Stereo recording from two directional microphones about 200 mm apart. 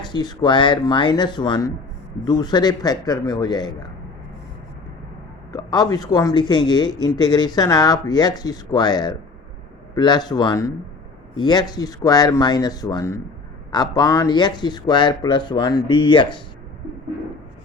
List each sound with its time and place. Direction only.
0.0 s speech: 20° left (ahead or behind)
5.5 s speech: 20° left (ahead or behind)